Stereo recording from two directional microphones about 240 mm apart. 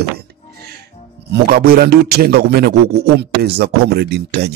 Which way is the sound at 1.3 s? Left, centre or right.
Right.